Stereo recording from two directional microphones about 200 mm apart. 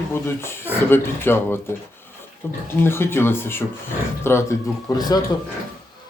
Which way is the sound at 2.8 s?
10° left (ahead or behind).